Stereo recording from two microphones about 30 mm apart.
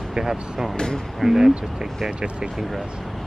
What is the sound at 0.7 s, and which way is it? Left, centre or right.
Speech, left.